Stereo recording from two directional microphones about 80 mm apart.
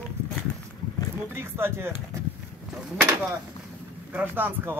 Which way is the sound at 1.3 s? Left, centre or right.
Right.